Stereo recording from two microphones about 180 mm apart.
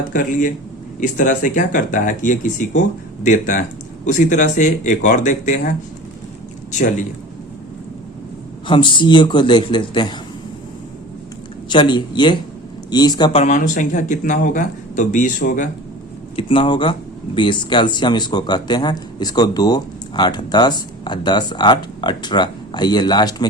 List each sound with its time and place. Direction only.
0.1 s speech: 45° left (ahead or behind)
6.7 s speech: 45° left (ahead or behind)
8.6 s speech: 25° left (ahead or behind)
11.7 s speech: 25° left (ahead or behind)
13.4 s speech: 45° left (ahead or behind)
16.3 s speech: 30° left (ahead or behind)